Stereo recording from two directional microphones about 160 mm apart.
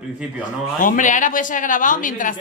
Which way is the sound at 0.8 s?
55° left (ahead or behind).